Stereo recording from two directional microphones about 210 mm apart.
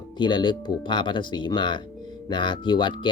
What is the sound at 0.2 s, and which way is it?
Speech, 20° left (ahead or behind).